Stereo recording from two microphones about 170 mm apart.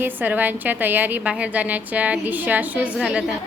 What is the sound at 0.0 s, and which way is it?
A woman's voice, 10° right (ahead or behind).